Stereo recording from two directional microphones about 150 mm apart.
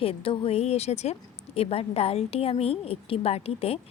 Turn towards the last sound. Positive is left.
turn(degrees=40)  # may be behind; listen again after turning